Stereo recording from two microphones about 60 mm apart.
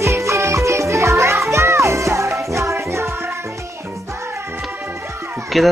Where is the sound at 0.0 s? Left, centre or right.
Right.